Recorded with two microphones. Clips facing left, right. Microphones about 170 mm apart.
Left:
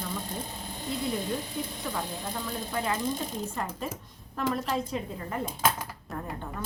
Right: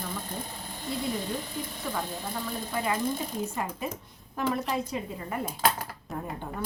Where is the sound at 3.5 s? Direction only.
10° right (ahead or behind).